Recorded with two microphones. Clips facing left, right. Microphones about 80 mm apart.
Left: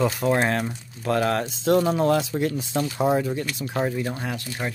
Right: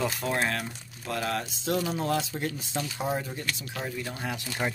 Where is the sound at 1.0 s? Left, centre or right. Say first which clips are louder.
Left 8 dB; left.